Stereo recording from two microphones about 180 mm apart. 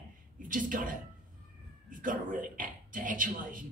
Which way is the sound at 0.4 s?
50° right (ahead or behind).